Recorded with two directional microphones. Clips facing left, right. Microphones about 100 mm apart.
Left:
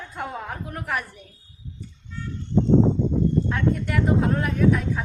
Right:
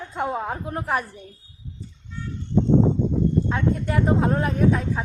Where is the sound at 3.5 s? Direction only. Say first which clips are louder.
Right 1 dB; 25° right (ahead or behind).